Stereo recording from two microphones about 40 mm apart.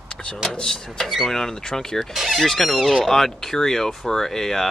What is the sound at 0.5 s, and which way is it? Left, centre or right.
Speech, centre.